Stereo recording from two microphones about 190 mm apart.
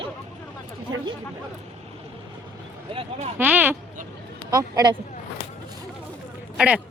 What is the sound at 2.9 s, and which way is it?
Speech, 30° right (ahead or behind).